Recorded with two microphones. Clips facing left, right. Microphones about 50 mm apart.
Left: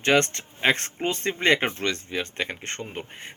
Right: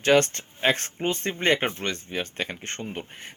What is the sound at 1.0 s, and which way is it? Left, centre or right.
Speech, left.